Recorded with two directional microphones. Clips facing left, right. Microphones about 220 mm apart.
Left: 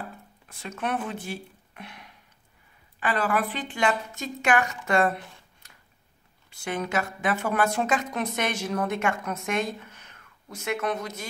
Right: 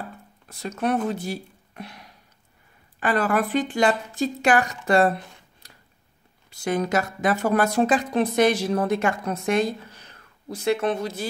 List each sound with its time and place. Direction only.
0.5 s a woman's voice: 40° right (ahead or behind)
5.6 s scissors: 35° right (ahead or behind)
6.5 s a woman's voice: 40° right (ahead or behind)